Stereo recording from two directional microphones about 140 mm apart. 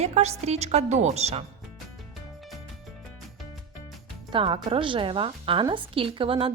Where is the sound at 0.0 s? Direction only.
50° right (ahead or behind).